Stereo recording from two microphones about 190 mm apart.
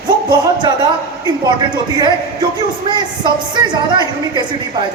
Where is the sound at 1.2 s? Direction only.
20° right (ahead or behind).